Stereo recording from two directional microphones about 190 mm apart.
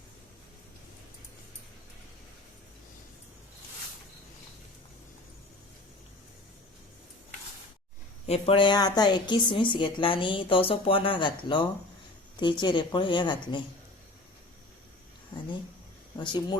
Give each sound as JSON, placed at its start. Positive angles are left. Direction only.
{"t": 8.3, "sound": "a woman's voice", "side_deg": 30}
{"t": 16.1, "sound": "a woman's voice", "side_deg": 25}